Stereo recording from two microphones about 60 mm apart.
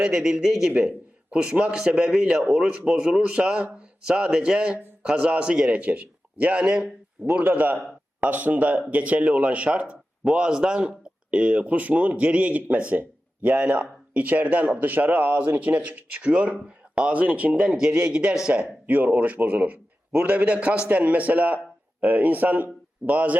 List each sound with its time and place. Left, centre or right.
0.0 s a man's voice: centre
0.7 s a man's voice: right
18.9 s a man's voice: right